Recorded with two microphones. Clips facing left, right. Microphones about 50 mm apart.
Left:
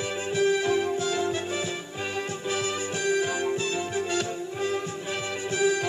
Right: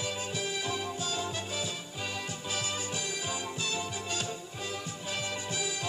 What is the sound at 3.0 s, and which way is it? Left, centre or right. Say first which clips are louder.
Music: left 11 dB; left.